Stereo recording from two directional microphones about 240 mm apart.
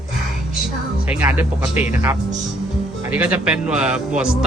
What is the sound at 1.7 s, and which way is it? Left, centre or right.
Speech, left.